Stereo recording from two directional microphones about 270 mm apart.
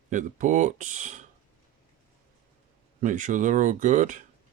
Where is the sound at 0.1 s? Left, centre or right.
Right.